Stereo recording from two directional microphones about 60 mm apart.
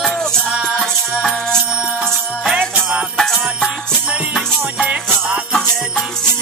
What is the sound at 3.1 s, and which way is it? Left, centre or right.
Music, centre.